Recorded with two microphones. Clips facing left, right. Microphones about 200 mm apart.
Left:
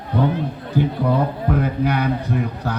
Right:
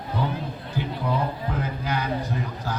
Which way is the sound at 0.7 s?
55° left (ahead or behind).